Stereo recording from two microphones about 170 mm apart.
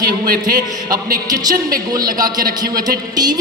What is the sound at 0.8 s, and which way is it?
Speech, 20° right (ahead or behind).